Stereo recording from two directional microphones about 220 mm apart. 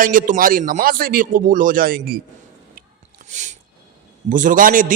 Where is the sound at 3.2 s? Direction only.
35° right (ahead or behind).